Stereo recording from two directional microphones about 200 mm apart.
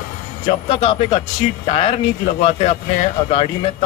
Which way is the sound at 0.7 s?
30° left (ahead or behind).